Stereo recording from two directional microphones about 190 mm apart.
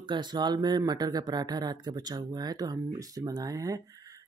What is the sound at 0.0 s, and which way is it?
Speech, 25° right (ahead or behind).